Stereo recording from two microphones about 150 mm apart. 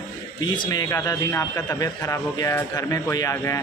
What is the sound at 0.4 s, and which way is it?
A man's voice, 30° left (ahead or behind).